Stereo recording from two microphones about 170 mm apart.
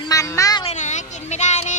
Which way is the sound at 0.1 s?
20° left (ahead or behind).